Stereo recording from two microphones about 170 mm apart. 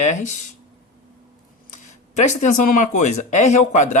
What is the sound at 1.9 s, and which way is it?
Speech, 45° left (ahead or behind).